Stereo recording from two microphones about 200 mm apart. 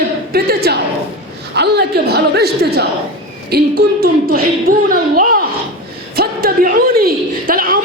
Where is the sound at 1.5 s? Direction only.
55° right (ahead or behind).